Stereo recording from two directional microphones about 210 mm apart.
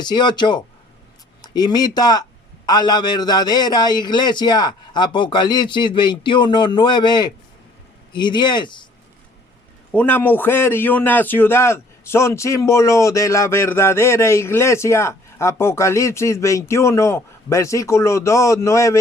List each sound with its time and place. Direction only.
0.0 s a man's voice: 20° left (ahead or behind)
9.9 s a man's voice: 10° left (ahead or behind)